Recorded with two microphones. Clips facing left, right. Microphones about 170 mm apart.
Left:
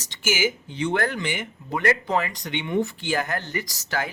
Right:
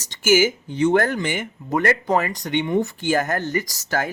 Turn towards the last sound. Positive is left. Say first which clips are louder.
# right 5 dB
turn(degrees=-45)  # may be behind; listen again after turning